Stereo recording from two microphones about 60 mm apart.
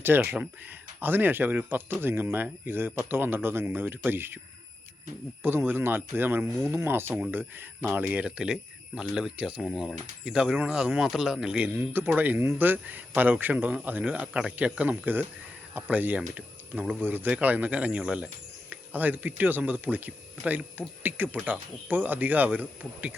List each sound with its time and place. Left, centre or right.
0.0 s speech: right
5.4 s speech: right
8.2 s speech: centre
9.3 s speech: right
9.6 s speech: centre
11.5 s speech: right